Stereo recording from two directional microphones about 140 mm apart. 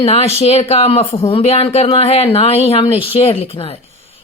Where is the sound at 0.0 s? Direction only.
45° left (ahead or behind).